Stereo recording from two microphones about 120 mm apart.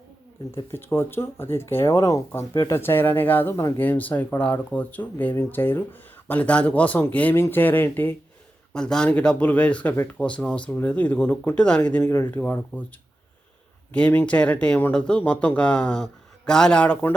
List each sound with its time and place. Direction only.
0.5 s speech: 20° left (ahead or behind)
8.7 s speech: 5° left (ahead or behind)
13.9 s speech: 10° left (ahead or behind)